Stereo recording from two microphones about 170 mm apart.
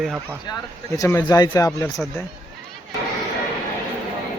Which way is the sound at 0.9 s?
15° left (ahead or behind).